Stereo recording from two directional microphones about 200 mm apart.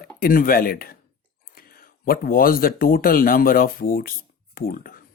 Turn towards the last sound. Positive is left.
turn(degrees=45)  # may be behind; listen again after turning